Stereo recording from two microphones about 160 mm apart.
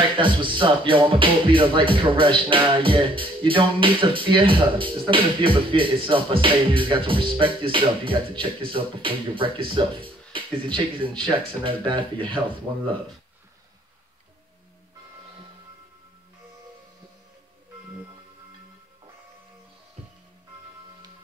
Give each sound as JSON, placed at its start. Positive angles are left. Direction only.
{"t": 0.2, "sound": "music", "side_deg": -30}